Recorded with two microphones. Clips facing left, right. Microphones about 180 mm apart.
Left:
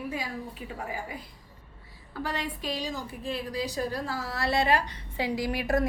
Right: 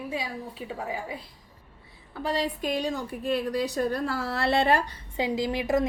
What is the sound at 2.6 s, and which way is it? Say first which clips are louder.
A woman's voice: right 5 dB; 55° right (ahead or behind).